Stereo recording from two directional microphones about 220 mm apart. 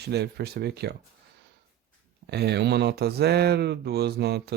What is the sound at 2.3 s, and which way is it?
Speech, 50° right (ahead or behind).